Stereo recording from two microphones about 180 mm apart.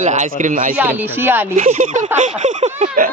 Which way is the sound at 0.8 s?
10° right (ahead or behind).